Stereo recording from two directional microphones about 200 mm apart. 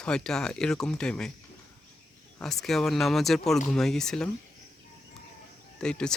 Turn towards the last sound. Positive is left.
turn(degrees=5)  # may be behind; listen again after turning